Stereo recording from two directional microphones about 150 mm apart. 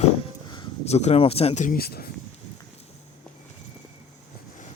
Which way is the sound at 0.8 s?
45° left (ahead or behind).